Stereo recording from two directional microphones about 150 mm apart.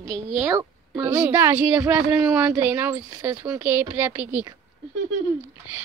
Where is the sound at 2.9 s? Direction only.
25° right (ahead or behind).